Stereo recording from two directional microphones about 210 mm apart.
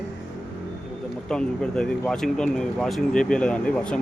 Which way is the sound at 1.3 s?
5° left (ahead or behind).